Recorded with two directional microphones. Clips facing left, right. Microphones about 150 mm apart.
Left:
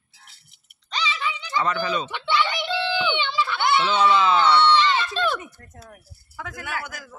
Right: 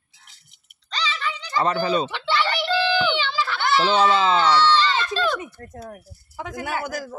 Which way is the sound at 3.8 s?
35° right (ahead or behind).